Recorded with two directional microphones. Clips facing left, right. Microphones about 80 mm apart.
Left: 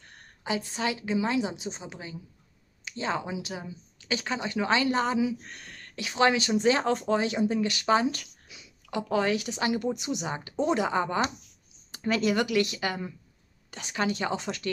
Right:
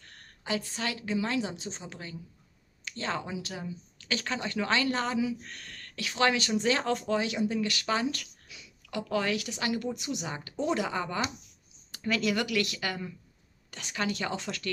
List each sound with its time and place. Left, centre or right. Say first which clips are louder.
0.0 s a woman's voice: left 4 dB; centre